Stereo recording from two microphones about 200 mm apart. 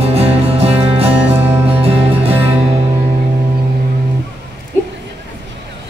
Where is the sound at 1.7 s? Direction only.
30° right (ahead or behind).